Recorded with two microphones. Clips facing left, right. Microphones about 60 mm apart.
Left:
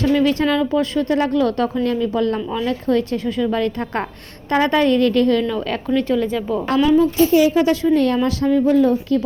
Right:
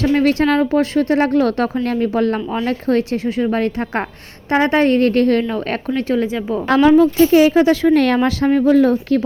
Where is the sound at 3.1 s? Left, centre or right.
Right.